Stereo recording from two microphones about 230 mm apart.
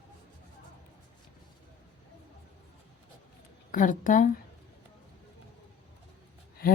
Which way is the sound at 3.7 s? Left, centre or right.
Left.